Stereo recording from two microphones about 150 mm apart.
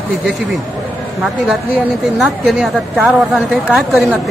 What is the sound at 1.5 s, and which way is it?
A woman's voice, 5° right (ahead or behind).